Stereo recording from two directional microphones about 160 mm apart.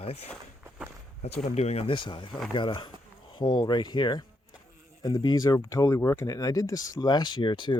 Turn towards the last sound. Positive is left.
turn(degrees=30)  # may be behind; listen again after turning